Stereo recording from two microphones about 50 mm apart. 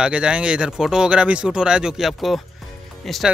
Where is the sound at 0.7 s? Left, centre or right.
Centre.